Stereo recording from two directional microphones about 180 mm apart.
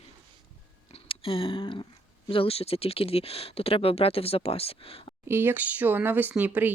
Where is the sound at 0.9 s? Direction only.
30° left (ahead or behind).